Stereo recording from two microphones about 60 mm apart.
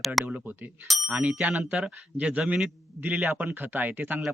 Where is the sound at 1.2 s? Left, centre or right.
Right.